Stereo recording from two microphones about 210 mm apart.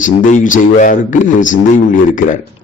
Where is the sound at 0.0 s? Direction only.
35° left (ahead or behind).